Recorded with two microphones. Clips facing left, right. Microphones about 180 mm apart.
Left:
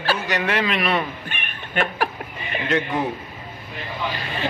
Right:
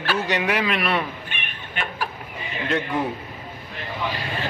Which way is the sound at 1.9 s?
65° left (ahead or behind).